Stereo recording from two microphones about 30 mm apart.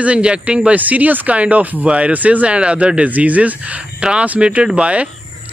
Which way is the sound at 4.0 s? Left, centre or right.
Right.